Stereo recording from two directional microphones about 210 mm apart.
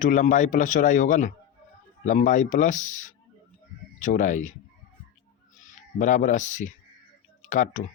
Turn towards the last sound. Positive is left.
turn(degrees=35)  # may be behind; listen again after turning